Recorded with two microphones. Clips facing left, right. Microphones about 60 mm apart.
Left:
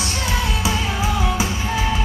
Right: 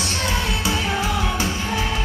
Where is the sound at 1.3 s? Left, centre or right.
Centre.